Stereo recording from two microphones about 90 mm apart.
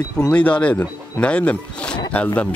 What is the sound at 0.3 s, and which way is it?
Speech, 15° left (ahead or behind).